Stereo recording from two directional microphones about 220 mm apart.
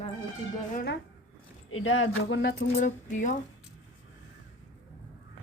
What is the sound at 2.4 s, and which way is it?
Speech, 40° left (ahead or behind).